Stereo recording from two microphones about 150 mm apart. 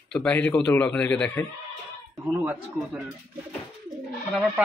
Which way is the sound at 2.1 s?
15° right (ahead or behind).